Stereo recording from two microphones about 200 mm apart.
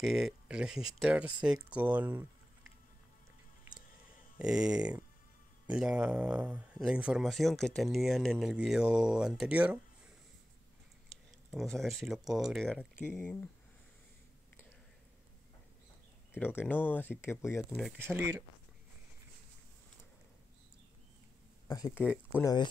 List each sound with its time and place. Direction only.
0.0 s speech: centre (ahead or behind)
4.4 s speech: 5° right (ahead or behind)
11.1 s speech: 5° left (ahead or behind)
16.3 s speech: 10° left (ahead or behind)
17.9 s speech: 10° right (ahead or behind)
21.6 s speech: 20° left (ahead or behind)
22.0 s speech: 5° right (ahead or behind)
22.4 s speech: 20° left (ahead or behind)